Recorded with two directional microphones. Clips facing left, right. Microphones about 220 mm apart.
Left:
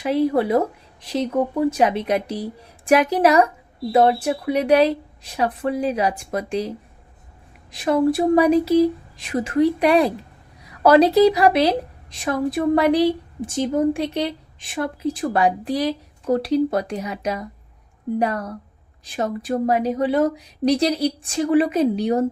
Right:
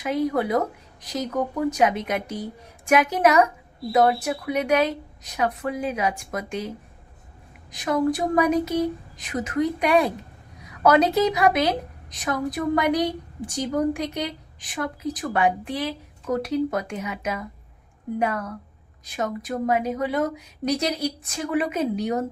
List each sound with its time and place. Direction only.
0.0 s a woman's voice: 30° left (ahead or behind)